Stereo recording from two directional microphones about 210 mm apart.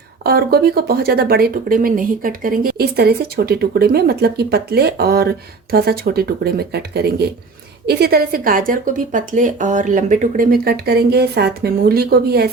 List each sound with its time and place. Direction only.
0.3 s speech: 50° right (ahead or behind)